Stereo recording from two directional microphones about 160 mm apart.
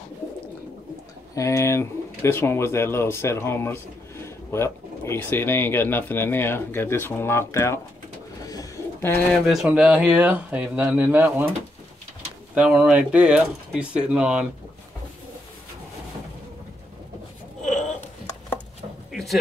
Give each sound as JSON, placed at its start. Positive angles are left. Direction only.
{"t": 1.3, "sound": "speech", "side_deg": 20}
{"t": 8.5, "sound": "bird", "side_deg": 20}
{"t": 9.3, "sound": "speech", "side_deg": 0}
{"t": 12.5, "sound": "speech", "side_deg": -5}